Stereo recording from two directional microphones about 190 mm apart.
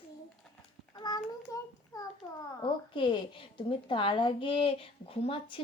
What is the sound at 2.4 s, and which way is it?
A woman's voice, 25° left (ahead or behind).